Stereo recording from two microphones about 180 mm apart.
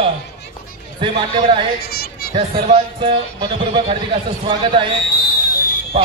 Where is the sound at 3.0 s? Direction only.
30° right (ahead or behind).